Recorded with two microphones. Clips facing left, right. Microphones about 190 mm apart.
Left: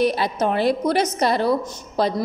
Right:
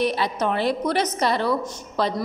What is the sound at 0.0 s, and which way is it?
A woman's voice, 40° left (ahead or behind).